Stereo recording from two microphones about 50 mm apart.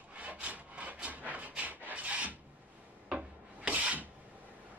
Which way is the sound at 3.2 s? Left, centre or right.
Right.